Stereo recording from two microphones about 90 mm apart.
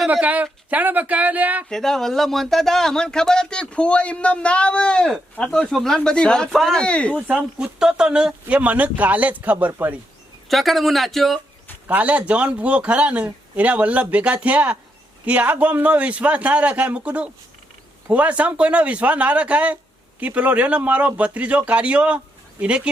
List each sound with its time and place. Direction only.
0.1 s speech: 15° right (ahead or behind)
1.7 s speech: 5° left (ahead or behind)
7.2 s speech: 10° right (ahead or behind)
10.5 s speech: centre (ahead or behind)
11.9 s speech: 15° right (ahead or behind)